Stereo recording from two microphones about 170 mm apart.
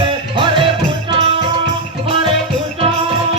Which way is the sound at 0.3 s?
30° right (ahead or behind).